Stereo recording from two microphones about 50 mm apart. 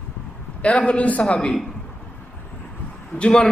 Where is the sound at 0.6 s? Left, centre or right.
Left.